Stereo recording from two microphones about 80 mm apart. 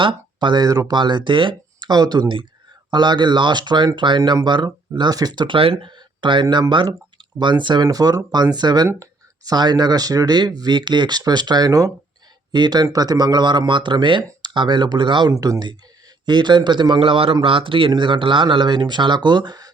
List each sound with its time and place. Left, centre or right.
0.0 s speech: right
0.7 s speech: right
0.9 s speech: right
2.9 s speech: right
5.8 s a sound: right
6.4 s speech: right
7.9 s speech: right
8.5 s speech: right
14.4 s speech: right
15.3 s speech: right
16.2 s speech: right